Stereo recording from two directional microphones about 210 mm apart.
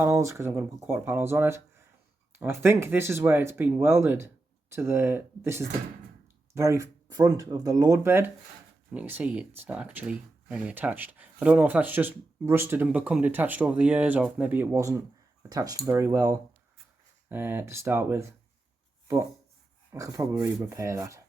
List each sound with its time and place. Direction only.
0.0 s speech: 15° right (ahead or behind)
19.9 s speech: 15° right (ahead or behind)